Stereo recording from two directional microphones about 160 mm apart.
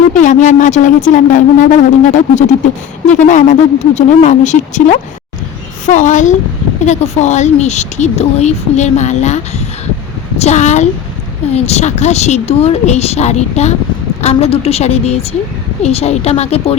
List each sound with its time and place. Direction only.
0.1 s a woman's voice: 55° left (ahead or behind)